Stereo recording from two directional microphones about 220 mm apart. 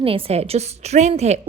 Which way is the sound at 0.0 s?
25° right (ahead or behind).